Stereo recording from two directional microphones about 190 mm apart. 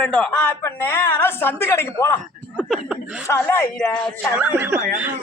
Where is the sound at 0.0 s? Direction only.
5° left (ahead or behind).